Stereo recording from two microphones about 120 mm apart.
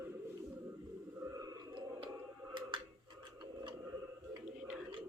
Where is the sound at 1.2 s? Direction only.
30° right (ahead or behind).